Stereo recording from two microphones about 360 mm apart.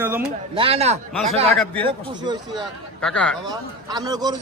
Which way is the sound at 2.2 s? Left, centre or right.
Centre.